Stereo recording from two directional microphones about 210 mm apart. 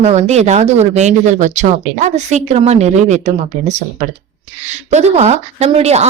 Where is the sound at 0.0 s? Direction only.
30° right (ahead or behind).